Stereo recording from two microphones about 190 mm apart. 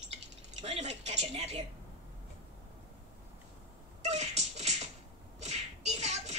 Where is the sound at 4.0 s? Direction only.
35° right (ahead or behind).